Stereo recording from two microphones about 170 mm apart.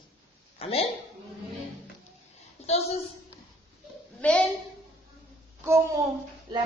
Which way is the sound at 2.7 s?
35° left (ahead or behind).